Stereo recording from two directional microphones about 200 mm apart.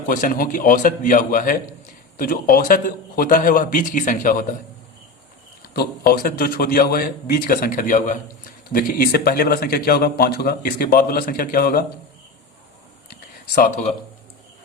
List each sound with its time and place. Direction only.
0.2 s a man's voice: 45° left (ahead or behind)
5.7 s a man's voice: 50° left (ahead or behind)
13.6 s speech: 40° left (ahead or behind)